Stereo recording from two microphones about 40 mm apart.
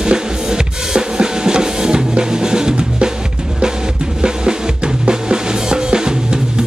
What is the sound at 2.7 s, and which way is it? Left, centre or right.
Drum, right.